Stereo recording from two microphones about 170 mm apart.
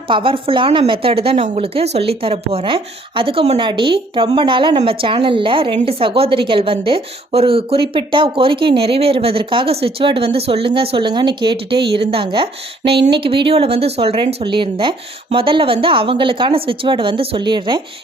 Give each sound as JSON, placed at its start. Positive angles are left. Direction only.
{"t": 0.1, "sound": "a woman's voice", "side_deg": -30}